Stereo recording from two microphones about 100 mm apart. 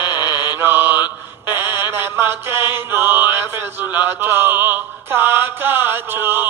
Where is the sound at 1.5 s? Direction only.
25° right (ahead or behind).